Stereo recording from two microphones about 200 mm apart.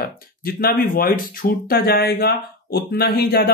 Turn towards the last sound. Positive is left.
turn(degrees=50)  # may be behind; listen again after turning